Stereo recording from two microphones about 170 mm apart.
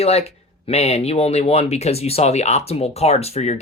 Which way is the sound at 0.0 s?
35° left (ahead or behind).